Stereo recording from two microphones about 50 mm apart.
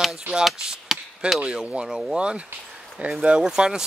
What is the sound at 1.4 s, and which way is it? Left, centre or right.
Speech, right.